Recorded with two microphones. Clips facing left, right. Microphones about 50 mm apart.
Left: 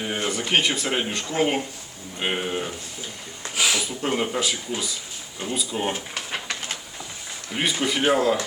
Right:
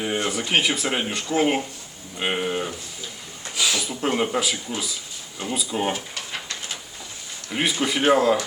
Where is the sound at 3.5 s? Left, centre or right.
Left.